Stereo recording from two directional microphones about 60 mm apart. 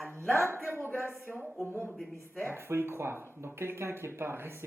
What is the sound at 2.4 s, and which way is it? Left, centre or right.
Speech, right.